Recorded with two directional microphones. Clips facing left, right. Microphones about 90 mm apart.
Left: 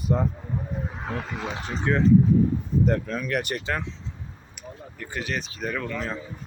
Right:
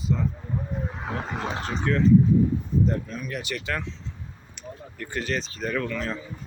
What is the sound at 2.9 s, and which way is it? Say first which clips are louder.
Speech: left 4 dB; 80° left.